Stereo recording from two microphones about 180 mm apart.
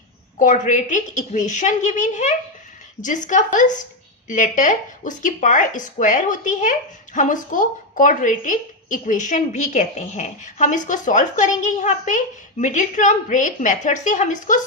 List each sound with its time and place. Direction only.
0.3 s speech: 45° left (ahead or behind)